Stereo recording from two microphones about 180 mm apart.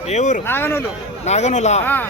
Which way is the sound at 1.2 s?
40° left (ahead or behind).